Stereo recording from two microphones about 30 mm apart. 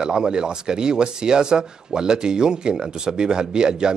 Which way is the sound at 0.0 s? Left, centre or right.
Right.